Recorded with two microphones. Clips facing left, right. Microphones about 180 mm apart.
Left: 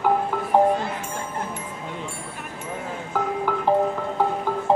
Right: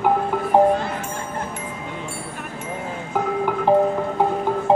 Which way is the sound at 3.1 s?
20° right (ahead or behind).